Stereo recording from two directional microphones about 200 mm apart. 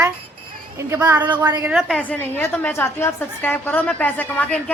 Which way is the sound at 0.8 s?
15° right (ahead or behind).